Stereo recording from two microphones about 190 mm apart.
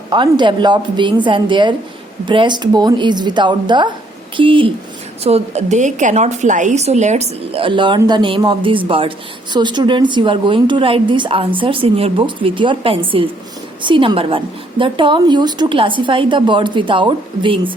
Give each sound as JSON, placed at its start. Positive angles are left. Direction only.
{"t": 0.1, "sound": "a woman's voice", "side_deg": -25}